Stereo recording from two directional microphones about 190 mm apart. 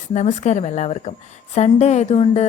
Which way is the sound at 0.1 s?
40° left (ahead or behind).